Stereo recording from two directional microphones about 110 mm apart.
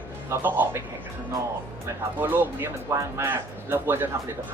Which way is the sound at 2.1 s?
15° right (ahead or behind).